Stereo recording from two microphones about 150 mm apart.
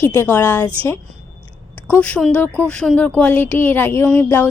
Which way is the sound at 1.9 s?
10° left (ahead or behind).